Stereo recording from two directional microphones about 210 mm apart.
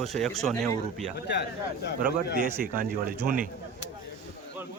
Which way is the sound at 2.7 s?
45° right (ahead or behind).